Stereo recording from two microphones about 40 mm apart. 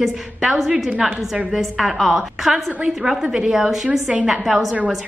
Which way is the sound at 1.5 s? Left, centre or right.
Centre.